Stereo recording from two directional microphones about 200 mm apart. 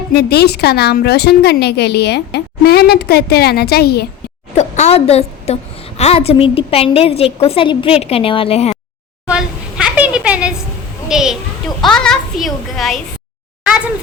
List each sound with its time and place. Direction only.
0.1 s a woman's voice: 50° left (ahead or behind)
4.5 s a woman's voice: 35° left (ahead or behind)
9.2 s a sound: 5° right (ahead or behind)